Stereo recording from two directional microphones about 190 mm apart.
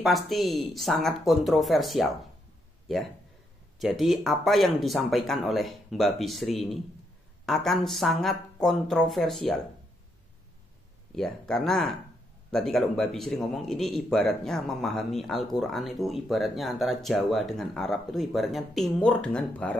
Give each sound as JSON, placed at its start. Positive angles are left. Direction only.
{"t": 0.0, "sound": "a man's voice", "side_deg": 0}
{"t": 3.8, "sound": "a man's voice", "side_deg": 0}
{"t": 11.1, "sound": "a man's voice", "side_deg": 5}